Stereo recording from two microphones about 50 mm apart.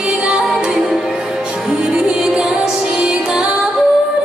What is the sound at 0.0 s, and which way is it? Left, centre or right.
Music, centre.